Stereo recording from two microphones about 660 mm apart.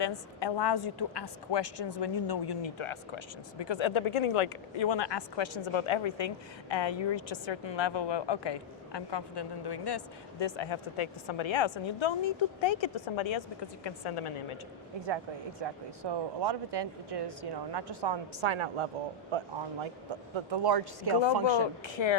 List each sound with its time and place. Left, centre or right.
0.0 s a woman's voice: left
15.0 s speech: right
21.6 s a woman's voice: left